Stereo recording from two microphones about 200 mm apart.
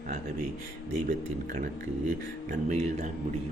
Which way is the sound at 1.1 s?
40° right (ahead or behind).